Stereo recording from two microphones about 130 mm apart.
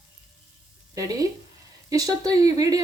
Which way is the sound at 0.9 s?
25° right (ahead or behind).